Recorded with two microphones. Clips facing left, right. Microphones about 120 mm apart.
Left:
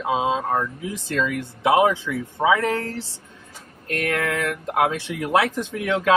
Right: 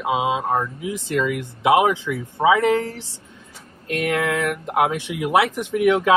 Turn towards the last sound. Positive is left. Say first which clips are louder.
# right 6 dB
turn(degrees=-15)  # may be behind; listen again after turning